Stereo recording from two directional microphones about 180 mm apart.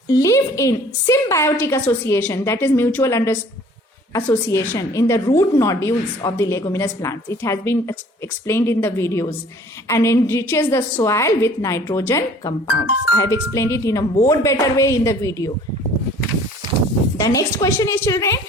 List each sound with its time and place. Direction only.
0.1 s a woman's voice: 15° left (ahead or behind)
17.2 s a woman's voice: 20° left (ahead or behind)